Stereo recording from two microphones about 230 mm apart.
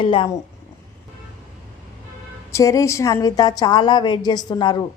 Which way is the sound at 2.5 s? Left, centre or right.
Centre.